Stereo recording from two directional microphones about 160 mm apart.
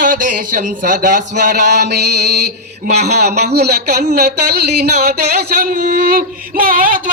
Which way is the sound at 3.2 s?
90° right.